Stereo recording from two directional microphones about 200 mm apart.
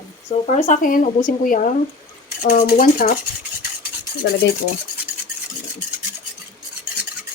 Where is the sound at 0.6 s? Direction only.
40° left (ahead or behind).